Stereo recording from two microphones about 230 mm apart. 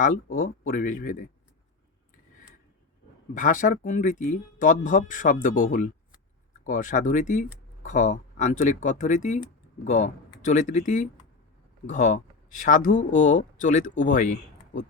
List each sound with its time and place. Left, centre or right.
0.0 s speech: left
3.3 s speech: left